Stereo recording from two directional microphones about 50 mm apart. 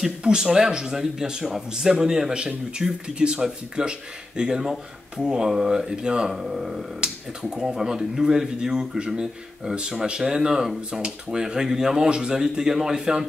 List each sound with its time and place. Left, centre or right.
0.0 s speech: centre